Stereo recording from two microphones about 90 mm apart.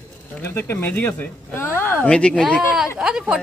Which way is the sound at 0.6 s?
25° left (ahead or behind).